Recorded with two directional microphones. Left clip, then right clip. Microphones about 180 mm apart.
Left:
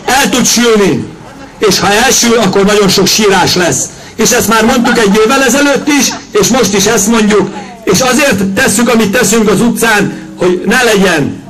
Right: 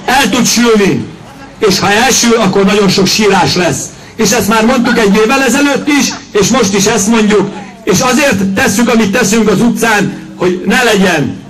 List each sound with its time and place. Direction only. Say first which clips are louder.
0.0 s a man's voice: even; 45° left (ahead or behind)